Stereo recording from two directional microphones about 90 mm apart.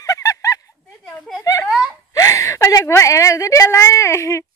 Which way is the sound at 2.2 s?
35° left (ahead or behind).